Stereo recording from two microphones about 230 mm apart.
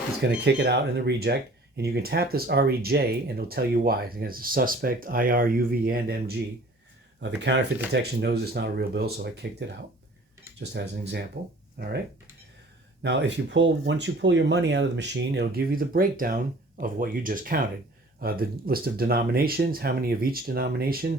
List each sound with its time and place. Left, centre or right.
0.2 s speech: right
7.2 s speech: right
13.0 s speech: right